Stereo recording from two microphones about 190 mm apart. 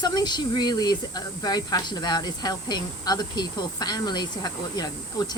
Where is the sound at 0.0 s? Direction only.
20° left (ahead or behind).